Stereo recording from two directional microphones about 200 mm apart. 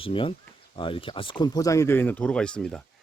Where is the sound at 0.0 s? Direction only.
25° left (ahead or behind).